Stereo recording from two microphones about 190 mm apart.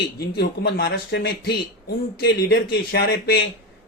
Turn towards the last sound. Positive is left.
turn(degrees=60)  # may be behind; listen again after turning